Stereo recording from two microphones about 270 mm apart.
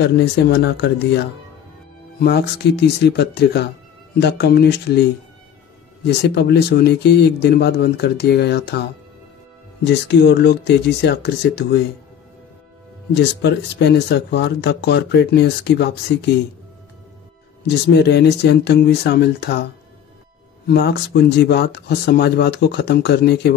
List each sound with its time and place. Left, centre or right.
0.2 s speech: left
6.0 s speech: left
9.8 s speech: left
13.1 s speech: left
17.6 s speech: left